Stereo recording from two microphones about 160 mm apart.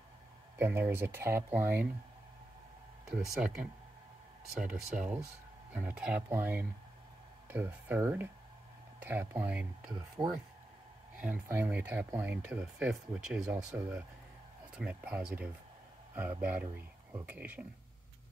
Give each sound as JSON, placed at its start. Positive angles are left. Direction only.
{"t": 0.6, "sound": "speech", "side_deg": -15}
{"t": 3.1, "sound": "speech", "side_deg": -5}
{"t": 10.2, "sound": "speech", "side_deg": -30}
{"t": 11.1, "sound": "speech", "side_deg": -10}